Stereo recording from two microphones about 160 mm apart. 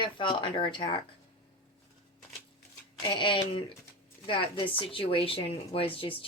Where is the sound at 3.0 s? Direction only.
30° left (ahead or behind).